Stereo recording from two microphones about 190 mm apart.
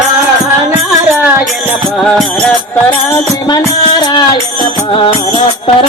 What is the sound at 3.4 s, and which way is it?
Music, 20° left (ahead or behind).